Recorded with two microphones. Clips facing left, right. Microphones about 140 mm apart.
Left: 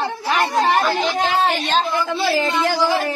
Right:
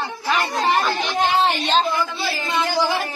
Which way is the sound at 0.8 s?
Centre (ahead or behind).